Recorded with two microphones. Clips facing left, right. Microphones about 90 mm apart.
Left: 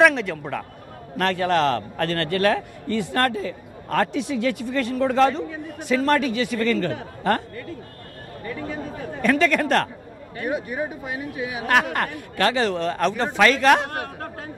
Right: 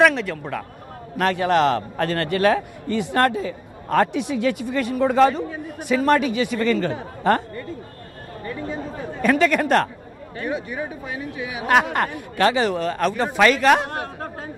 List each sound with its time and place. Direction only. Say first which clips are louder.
0.0 s a man's voice: even; centre (ahead or behind)
1.1 s a man's voice: right 2 dB; 10° right (ahead or behind)
9.2 s a man's voice: right 1 dB; 15° right (ahead or behind)
10.4 s speech: left 1 dB; 15° left (ahead or behind)
11.6 s a man's voice: right 3 dB; 20° right (ahead or behind)
13.8 s speech: right 1 dB; 25° right (ahead or behind)